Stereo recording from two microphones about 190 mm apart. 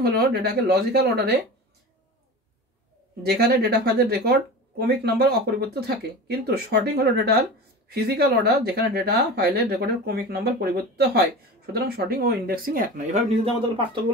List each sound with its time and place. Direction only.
0.0 s speech: 55° right (ahead or behind)
3.2 s speech: 55° right (ahead or behind); by 13.5 s 40° right (ahead or behind)